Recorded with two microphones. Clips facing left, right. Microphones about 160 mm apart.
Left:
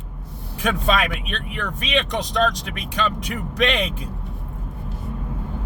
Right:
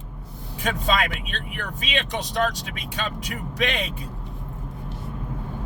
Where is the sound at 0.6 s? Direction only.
70° left (ahead or behind).